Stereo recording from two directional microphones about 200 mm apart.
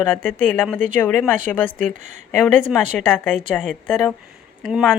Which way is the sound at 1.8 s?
40° right (ahead or behind).